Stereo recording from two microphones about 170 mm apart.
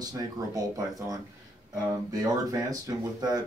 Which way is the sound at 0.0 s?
20° right (ahead or behind).